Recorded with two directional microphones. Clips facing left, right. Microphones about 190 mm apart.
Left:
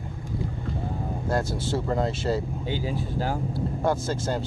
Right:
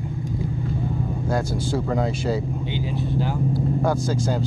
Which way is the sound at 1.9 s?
Centre (ahead or behind).